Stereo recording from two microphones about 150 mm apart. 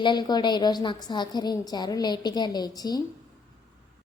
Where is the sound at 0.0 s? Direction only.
30° left (ahead or behind).